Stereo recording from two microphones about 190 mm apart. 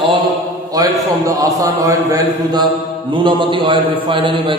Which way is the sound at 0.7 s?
20° right (ahead or behind).